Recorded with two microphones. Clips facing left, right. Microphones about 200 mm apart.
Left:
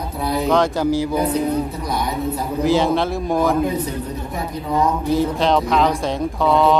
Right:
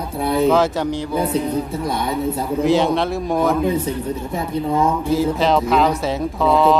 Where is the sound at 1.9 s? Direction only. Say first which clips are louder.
Right 1 dB; 25° right (ahead or behind).